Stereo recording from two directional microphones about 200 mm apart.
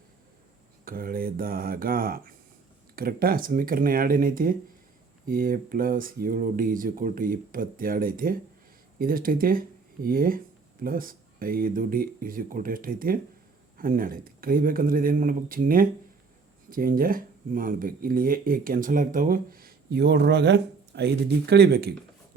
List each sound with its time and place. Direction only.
0.9 s speech: 45° right (ahead or behind)